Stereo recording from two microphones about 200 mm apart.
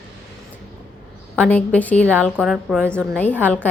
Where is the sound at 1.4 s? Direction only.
5° left (ahead or behind).